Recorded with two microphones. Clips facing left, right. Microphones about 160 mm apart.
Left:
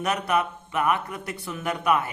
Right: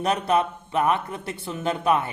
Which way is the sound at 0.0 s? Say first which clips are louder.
Right 3 dB; 30° right (ahead or behind).